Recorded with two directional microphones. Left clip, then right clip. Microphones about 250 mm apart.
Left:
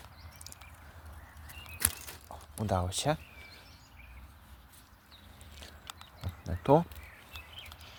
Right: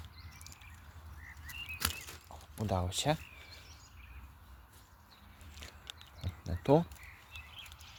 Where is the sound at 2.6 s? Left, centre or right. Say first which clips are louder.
Left 3 dB; centre.